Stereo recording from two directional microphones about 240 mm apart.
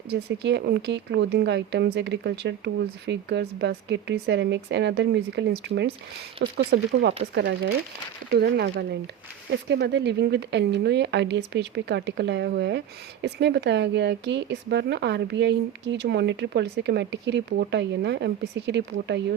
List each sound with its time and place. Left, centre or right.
0.1 s speech: right